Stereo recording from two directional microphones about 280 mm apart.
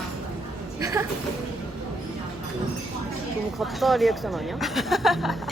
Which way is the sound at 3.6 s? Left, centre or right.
Centre.